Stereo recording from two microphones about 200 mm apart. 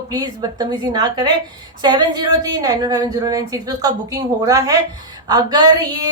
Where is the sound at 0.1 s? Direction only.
20° right (ahead or behind).